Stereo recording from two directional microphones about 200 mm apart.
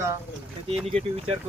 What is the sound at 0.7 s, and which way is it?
Speech, 30° right (ahead or behind).